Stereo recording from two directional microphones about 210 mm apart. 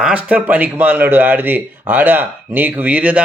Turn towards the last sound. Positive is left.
turn(degrees=-5)  # may be behind; listen again after turning